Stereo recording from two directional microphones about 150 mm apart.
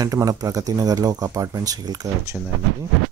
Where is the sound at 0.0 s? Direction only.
25° right (ahead or behind).